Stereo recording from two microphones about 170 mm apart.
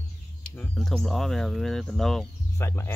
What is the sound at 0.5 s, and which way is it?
Speech, centre (ahead or behind).